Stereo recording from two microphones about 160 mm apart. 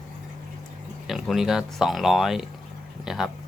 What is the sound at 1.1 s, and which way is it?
Speech, centre (ahead or behind).